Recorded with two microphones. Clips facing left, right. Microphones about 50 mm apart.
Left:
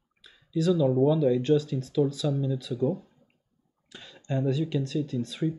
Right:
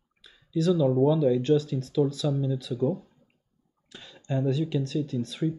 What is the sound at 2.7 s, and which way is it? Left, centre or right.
Speech, centre.